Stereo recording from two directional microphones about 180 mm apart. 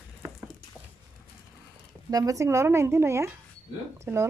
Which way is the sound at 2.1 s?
20° right (ahead or behind).